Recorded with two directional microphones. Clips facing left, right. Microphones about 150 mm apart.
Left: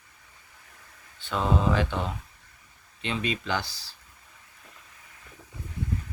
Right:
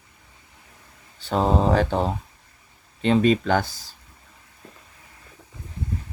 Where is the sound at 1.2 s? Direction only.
40° right (ahead or behind).